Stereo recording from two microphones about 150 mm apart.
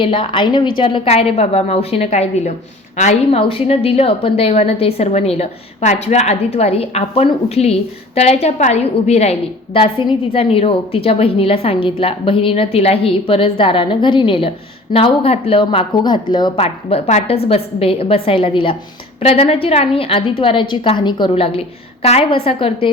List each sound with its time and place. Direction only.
0.0 s a woman's voice: 35° left (ahead or behind)